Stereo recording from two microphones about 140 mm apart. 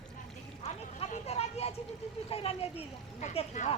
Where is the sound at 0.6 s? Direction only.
50° left (ahead or behind).